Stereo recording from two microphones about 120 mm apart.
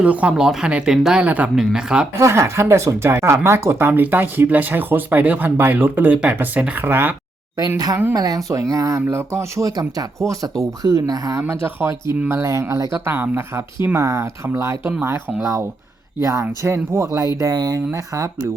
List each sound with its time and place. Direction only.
0.0 s speech: 10° right (ahead or behind)
2.1 s speech: 25° right (ahead or behind)
8.1 s speech: 35° right (ahead or behind)